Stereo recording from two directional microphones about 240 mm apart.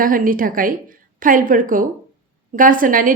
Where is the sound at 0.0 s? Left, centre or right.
Right.